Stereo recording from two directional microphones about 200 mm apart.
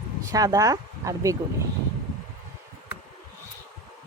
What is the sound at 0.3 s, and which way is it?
Speech, 15° right (ahead or behind).